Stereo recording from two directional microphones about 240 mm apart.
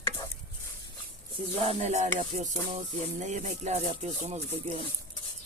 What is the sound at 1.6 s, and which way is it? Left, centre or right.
Music, right.